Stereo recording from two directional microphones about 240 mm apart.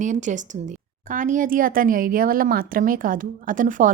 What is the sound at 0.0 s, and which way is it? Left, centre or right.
Speech, right.